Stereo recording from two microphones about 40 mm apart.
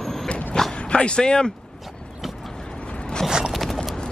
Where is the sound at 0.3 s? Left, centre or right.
Left.